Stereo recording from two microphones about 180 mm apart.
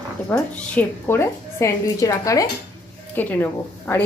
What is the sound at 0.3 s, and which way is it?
A woman's voice, 10° left (ahead or behind).